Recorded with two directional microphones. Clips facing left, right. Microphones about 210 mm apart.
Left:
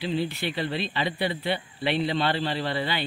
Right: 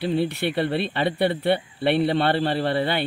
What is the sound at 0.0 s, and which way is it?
Speech, 60° right (ahead or behind).